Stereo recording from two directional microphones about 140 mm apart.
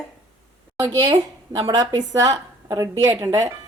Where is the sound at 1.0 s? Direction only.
30° right (ahead or behind).